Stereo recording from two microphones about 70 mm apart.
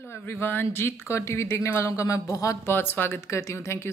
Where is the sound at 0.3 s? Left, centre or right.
Left.